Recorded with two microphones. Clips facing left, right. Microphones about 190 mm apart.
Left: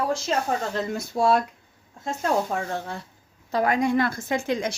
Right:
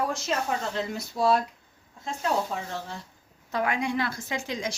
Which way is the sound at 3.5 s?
40° left (ahead or behind).